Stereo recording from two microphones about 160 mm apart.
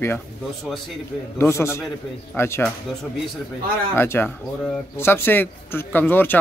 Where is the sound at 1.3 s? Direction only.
15° left (ahead or behind).